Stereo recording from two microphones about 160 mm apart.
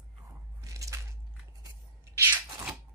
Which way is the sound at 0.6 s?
20° right (ahead or behind).